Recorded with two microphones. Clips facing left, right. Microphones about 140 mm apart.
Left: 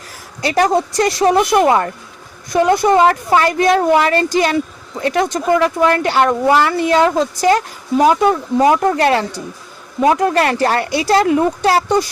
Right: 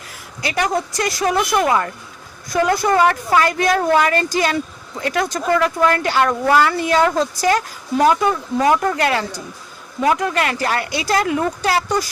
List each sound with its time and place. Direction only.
0.4 s speech: 35° left (ahead or behind)